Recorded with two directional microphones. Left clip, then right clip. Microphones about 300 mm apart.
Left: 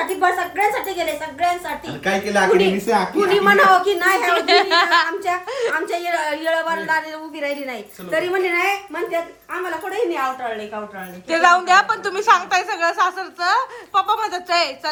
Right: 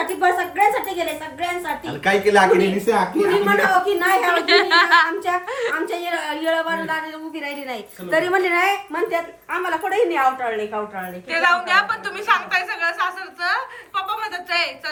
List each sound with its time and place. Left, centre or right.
0.2 s a woman's voice: centre
2.0 s a woman's voice: centre
2.6 s a woman's voice: centre